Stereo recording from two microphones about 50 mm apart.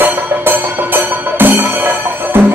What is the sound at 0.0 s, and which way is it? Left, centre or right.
Music, right.